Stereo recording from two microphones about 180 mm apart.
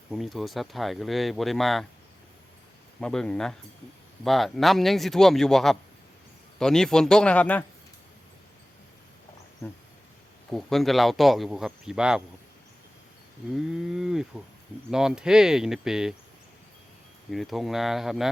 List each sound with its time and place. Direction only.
0.1 s speech: centre (ahead or behind)
3.0 s speech: 5° left (ahead or behind)
9.6 s speech: 15° left (ahead or behind)
10.5 s speech: centre (ahead or behind)
13.6 s speech: 5° right (ahead or behind)
17.3 s speech: centre (ahead or behind)